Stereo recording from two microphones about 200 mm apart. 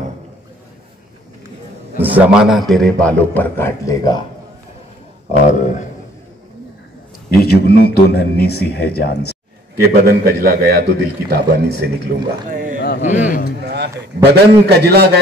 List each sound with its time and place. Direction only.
2.0 s a man's voice: 10° right (ahead or behind); by 4.2 s 20° left (ahead or behind)
5.5 s a man's voice: 35° left (ahead or behind)
7.2 s a man's voice: 50° left (ahead or behind)
9.8 s a man's voice: 50° right (ahead or behind)
12.4 s a sound: 40° right (ahead or behind)
13.0 s a man's voice: 35° left (ahead or behind)
13.6 s a man's voice: 55° right (ahead or behind)